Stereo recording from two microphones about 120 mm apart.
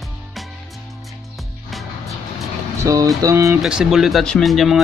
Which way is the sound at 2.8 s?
30° right (ahead or behind).